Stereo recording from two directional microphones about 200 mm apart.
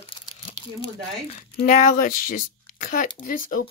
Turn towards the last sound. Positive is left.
turn(degrees=45)  # may be behind; listen again after turning